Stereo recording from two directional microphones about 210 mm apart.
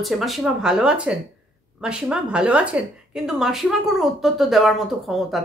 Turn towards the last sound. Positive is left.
turn(degrees=0)  # may be behind; listen again after turning